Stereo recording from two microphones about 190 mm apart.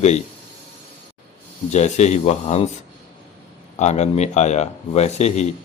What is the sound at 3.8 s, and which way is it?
Speech, 35° left (ahead or behind).